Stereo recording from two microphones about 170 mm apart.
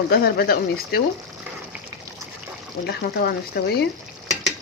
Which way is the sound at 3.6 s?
65° left (ahead or behind).